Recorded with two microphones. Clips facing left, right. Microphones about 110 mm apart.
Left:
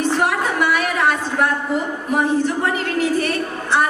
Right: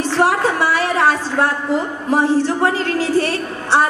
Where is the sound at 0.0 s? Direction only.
30° right (ahead or behind).